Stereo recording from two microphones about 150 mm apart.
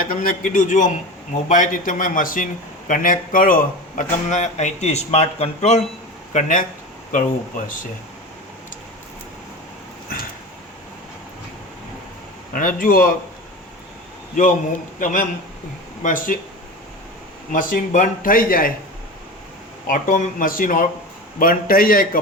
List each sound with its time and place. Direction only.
0.0 s a man's voice: 70° left (ahead or behind); by 5.8 s 45° left (ahead or behind)
6.3 s a man's voice: 60° left (ahead or behind)
12.5 s speech: 65° left (ahead or behind)
14.9 s a man's voice: 60° left (ahead or behind)
17.5 s speech: 65° left (ahead or behind)
19.9 s a man's voice: 60° left (ahead or behind)